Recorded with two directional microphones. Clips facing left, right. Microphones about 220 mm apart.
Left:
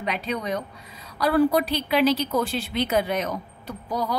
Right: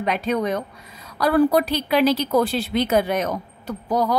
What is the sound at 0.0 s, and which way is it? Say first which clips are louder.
A woman's voice: right 6 dB; 50° right (ahead or behind).